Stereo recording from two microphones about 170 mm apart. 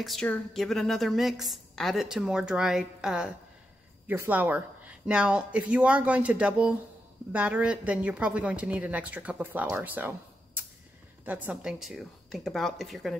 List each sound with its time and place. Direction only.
0.0 s a woman's voice: 5° left (ahead or behind)